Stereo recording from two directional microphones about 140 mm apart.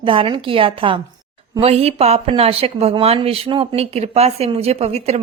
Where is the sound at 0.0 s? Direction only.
40° right (ahead or behind).